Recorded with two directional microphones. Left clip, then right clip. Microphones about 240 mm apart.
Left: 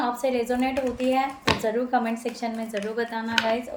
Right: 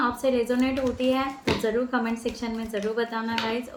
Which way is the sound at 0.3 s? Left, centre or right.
Centre.